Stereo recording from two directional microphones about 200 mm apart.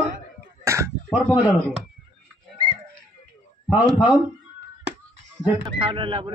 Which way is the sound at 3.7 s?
20° left (ahead or behind).